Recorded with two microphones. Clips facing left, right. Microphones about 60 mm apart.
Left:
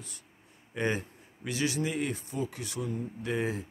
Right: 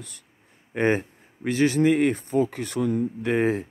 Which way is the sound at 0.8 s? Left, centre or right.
Right.